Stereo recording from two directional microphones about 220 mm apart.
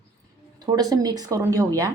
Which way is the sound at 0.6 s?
20° right (ahead or behind).